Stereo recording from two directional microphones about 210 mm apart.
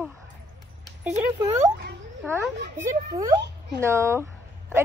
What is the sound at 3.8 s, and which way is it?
Speech, 10° right (ahead or behind).